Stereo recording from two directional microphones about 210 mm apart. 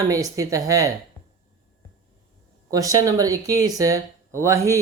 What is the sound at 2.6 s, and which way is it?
Speech, 15° right (ahead or behind).